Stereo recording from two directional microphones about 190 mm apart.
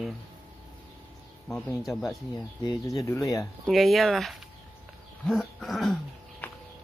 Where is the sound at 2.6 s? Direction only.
20° left (ahead or behind).